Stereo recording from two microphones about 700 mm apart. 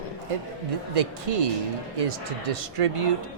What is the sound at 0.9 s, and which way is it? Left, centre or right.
Speech, right.